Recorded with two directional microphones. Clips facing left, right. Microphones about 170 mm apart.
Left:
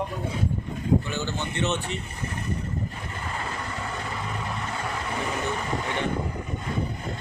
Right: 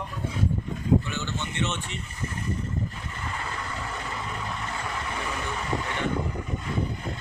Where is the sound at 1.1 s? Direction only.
35° left (ahead or behind).